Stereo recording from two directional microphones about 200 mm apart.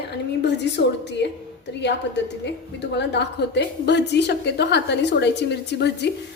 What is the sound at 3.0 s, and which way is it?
A woman's voice, 60° left (ahead or behind).